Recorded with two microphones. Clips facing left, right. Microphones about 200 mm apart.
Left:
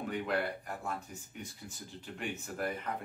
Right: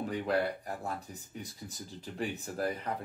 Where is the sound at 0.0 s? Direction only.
35° right (ahead or behind).